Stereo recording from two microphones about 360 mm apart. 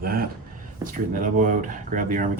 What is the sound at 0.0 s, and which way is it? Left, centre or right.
Speech, right.